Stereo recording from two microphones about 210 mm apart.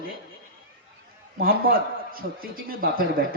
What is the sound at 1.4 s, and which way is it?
A man's voice, 45° right (ahead or behind).